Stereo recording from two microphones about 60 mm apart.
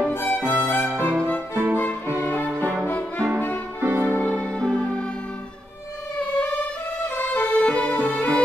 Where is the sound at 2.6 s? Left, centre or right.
Right.